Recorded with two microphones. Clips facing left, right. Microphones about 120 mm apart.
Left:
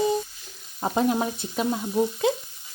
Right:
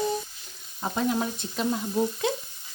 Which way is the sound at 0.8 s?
25° left (ahead or behind).